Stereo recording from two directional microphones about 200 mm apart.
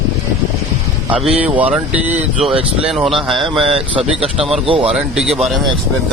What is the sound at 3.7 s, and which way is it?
Speech, 30° right (ahead or behind).